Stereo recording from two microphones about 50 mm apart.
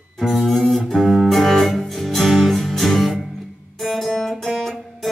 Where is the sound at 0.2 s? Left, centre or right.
Centre.